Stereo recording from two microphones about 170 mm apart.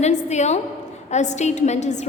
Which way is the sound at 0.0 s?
40° left (ahead or behind).